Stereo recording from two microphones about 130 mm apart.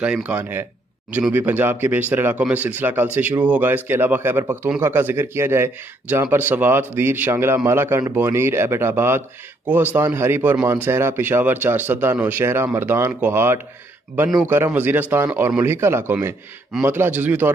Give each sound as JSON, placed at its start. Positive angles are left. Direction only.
{"t": 0.0, "sound": "a man's voice", "side_deg": -10}